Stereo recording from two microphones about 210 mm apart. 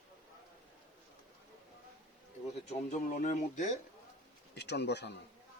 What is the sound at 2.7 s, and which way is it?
Speech, 35° left (ahead or behind).